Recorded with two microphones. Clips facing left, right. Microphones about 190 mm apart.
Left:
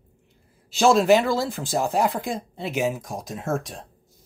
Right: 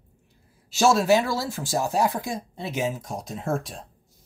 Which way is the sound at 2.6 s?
15° left (ahead or behind).